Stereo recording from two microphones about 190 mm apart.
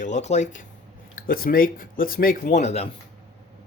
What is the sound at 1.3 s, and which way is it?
Speech, 50° left (ahead or behind).